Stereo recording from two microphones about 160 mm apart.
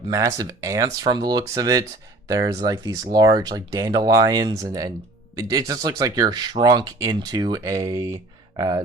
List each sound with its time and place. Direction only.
0.1 s speech: 20° right (ahead or behind)